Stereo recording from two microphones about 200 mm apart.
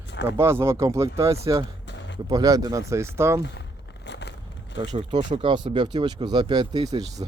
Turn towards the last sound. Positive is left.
turn(degrees=-20)  # may be behind; listen again after turning